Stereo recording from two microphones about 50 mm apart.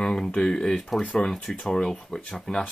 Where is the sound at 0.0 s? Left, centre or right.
Centre.